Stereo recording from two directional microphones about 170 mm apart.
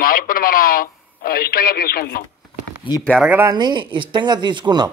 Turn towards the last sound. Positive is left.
turn(degrees=-25)  # may be behind; listen again after turning